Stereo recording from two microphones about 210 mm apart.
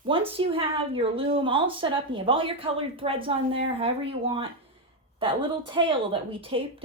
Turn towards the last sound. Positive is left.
turn(degrees=-25)  # may be behind; listen again after turning